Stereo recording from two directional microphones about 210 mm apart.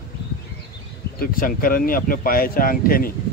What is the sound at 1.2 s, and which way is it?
Speech, 40° left (ahead or behind).